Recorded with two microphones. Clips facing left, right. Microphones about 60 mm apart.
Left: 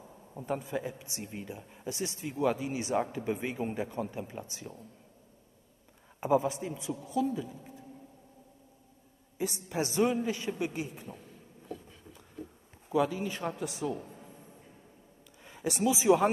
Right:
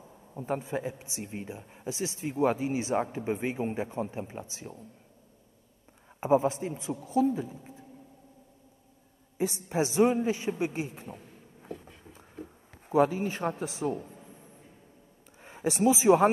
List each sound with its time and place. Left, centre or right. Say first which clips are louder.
0.5 s a man's voice: right 2 dB; right
2.1 s a man's voice: right 3 dB; right
6.2 s a man's voice: right 3 dB; right
9.4 s a man's voice: right 4 dB; right
11.6 s a sound: right 1 dB; right
12.9 s a man's voice: right 4 dB; right
13.9 s music: right 3 dB; centre
15.4 s a sound: right 4 dB; right
15.8 s a man's voice: right 3 dB; right